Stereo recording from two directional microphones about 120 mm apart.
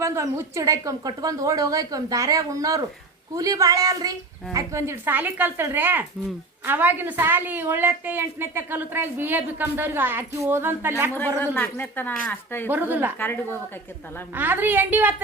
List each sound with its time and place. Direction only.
0.0 s a woman's voice: 25° right (ahead or behind)
11.3 s speech: 15° left (ahead or behind)
12.6 s a woman's voice: 15° right (ahead or behind)
13.1 s speech: 15° left (ahead or behind)
14.3 s a woman's voice: 15° right (ahead or behind)